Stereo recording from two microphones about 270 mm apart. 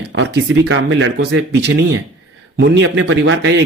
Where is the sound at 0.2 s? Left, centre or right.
Right.